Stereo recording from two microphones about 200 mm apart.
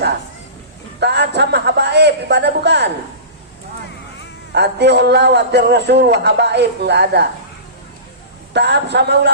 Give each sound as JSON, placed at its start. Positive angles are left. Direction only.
{"t": 0.9, "sound": "a man's voice", "side_deg": -55}
{"t": 4.5, "sound": "a man's voice", "side_deg": -55}
{"t": 8.5, "sound": "a man's voice", "side_deg": -60}